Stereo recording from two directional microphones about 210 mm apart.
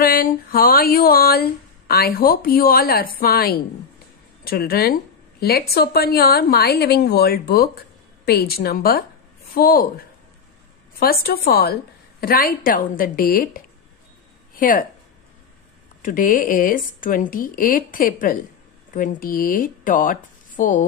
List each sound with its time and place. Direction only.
0.0 s a woman's voice: 45° left (ahead or behind)
16.0 s a woman's voice: 40° left (ahead or behind)